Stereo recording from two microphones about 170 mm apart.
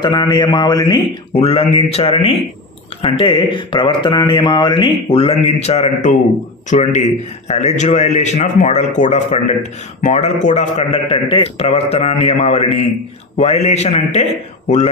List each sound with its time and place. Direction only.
0.0 s a man's voice: 25° left (ahead or behind)